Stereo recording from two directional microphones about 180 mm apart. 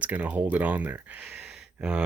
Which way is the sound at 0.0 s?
10° right (ahead or behind).